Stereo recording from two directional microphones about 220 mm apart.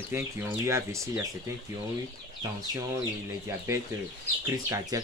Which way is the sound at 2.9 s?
15° right (ahead or behind).